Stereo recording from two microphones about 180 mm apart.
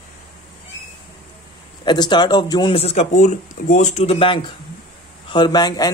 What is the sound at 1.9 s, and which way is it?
A man's voice, 25° left (ahead or behind).